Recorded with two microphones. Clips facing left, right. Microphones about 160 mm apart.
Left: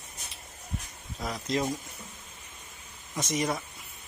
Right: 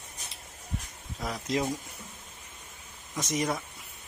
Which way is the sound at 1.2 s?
Centre (ahead or behind).